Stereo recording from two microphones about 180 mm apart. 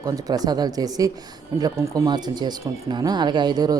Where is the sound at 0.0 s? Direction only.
20° right (ahead or behind).